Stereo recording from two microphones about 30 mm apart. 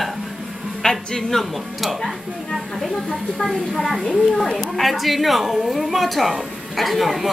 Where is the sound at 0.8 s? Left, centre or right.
Centre.